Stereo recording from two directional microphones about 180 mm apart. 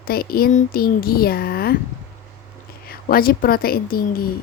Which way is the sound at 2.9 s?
55° left (ahead or behind).